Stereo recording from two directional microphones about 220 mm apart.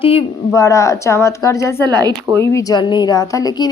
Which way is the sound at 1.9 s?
15° right (ahead or behind).